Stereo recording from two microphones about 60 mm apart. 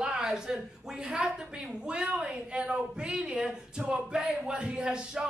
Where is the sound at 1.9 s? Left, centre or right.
Centre.